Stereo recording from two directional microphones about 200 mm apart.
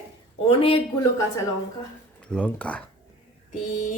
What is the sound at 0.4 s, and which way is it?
Speech, 30° left (ahead or behind).